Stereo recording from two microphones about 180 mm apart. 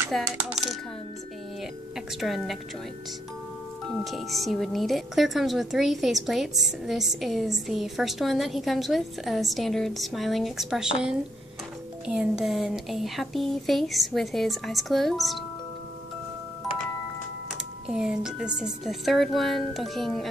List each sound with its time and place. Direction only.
0.2 s speech: 5° right (ahead or behind)
2.1 s speech: centre (ahead or behind)
3.8 s speech: centre (ahead or behind)
12.1 s speech: 5° right (ahead or behind)
17.8 s speech: 5° right (ahead or behind)